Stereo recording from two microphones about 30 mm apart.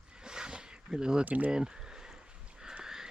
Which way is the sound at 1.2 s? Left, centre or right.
Right.